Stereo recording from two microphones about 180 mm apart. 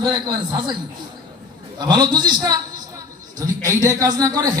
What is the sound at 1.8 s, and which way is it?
A man's voice, 20° right (ahead or behind).